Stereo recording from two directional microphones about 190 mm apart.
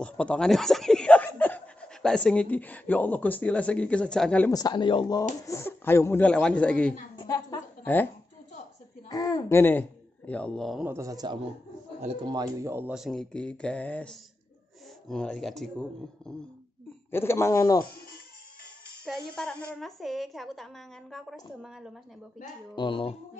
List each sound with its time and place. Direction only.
0.0 s speech: 5° left (ahead or behind)
4.5 s speech: 20° left (ahead or behind)
5.5 s speech: 10° left (ahead or behind)
7.2 s a sound: 20° left (ahead or behind)
7.8 s speech: 10° left (ahead or behind)
9.1 s speech: 20° left (ahead or behind); by 10.9 s centre (ahead or behind)
10.9 s a man's voice: 15° right (ahead or behind); by 17.7 s 15° left (ahead or behind)
17.7 s speech: 50° left (ahead or behind)
19.0 s a woman's voice: 5° left (ahead or behind)
22.8 s speech: 25° left (ahead or behind)